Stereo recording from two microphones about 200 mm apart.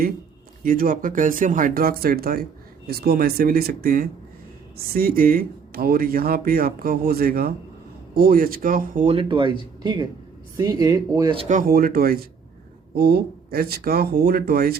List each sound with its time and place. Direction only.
0.6 s speech: 45° right (ahead or behind); by 11.4 s 20° right (ahead or behind)
11.4 s speech: 45° right (ahead or behind)